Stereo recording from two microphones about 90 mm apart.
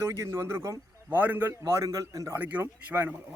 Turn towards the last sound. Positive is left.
turn(degrees=-20)  # may be behind; listen again after turning